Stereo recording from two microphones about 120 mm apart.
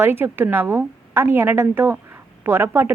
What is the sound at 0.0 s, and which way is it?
A woman's voice, 20° right (ahead or behind).